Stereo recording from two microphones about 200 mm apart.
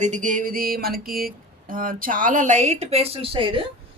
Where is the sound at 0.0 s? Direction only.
40° right (ahead or behind).